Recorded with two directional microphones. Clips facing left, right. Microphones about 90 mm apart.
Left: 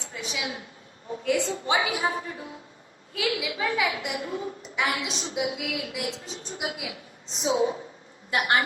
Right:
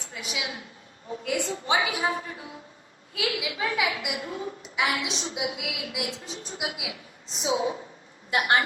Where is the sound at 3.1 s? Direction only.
30° left (ahead or behind).